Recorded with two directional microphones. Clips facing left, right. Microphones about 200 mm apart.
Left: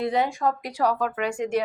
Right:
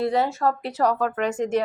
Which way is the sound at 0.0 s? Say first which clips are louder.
Right 2 dB; 20° left (ahead or behind).